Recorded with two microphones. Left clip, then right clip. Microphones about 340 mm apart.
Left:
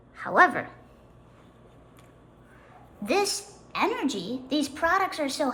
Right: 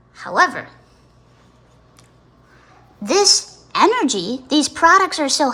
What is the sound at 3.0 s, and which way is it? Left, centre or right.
A woman's voice, centre.